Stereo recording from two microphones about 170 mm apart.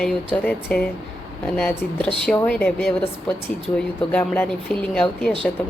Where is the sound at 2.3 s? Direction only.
10° left (ahead or behind).